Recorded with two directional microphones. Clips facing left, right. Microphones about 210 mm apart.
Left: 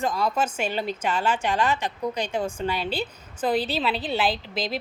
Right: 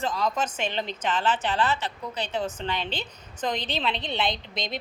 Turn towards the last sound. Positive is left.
turn(degrees=5)  # may be behind; listen again after turning